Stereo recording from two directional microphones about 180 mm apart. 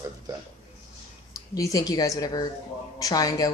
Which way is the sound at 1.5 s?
20° left (ahead or behind).